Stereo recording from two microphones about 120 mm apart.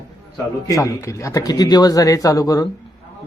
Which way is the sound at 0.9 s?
25° left (ahead or behind).